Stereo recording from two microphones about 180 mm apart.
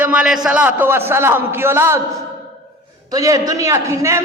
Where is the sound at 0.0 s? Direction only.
5° right (ahead or behind).